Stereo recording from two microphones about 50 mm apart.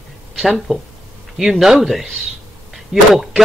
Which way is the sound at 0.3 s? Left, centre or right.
Centre.